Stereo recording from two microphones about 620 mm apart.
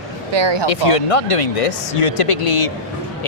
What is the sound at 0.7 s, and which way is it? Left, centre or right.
Speech, left.